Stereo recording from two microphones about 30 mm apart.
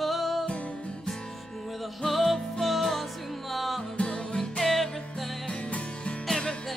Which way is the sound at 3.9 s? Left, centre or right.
Left.